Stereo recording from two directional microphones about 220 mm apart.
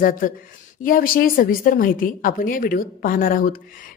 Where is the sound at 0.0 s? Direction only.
40° left (ahead or behind).